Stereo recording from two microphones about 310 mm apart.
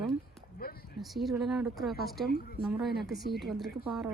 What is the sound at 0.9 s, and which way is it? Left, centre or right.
Speech, centre.